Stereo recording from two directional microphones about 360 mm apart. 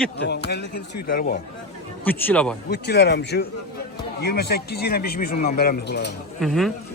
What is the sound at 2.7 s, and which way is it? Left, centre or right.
Speech, left.